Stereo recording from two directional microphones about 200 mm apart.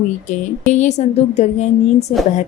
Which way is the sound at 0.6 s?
35° left (ahead or behind).